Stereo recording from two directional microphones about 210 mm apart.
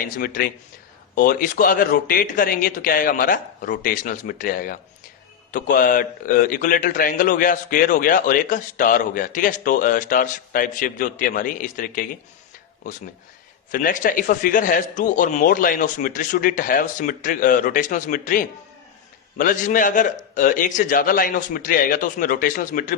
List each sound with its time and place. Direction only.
0.0 s a man's voice: 45° left (ahead or behind)
13.7 s a man's voice: 40° left (ahead or behind)